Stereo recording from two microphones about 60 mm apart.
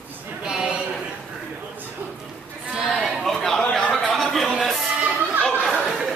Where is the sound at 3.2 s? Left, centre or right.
Centre.